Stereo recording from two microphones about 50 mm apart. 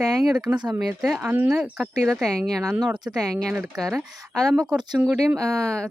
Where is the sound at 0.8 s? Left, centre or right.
Centre.